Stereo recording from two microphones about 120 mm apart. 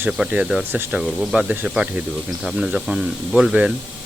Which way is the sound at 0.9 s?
5° right (ahead or behind).